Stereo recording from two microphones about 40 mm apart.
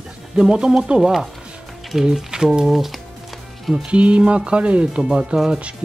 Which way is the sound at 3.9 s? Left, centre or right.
Right.